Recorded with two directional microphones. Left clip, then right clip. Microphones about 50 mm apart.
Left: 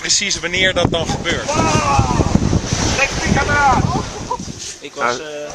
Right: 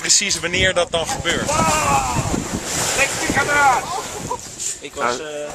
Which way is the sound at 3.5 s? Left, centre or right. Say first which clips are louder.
Left 1 dB; right.